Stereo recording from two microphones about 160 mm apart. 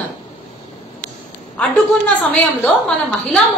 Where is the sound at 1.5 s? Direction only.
5° left (ahead or behind).